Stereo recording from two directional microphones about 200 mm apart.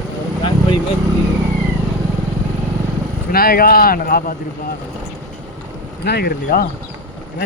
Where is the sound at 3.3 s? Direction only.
50° left (ahead or behind).